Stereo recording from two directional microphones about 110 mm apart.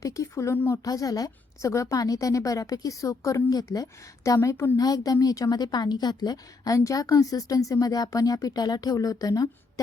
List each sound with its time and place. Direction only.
0.0 s a woman's voice: 30° left (ahead or behind)
0.9 s a woman's voice: 35° left (ahead or behind)